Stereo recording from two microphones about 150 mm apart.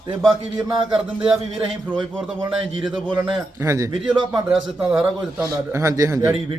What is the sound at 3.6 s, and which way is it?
Speech, 20° right (ahead or behind).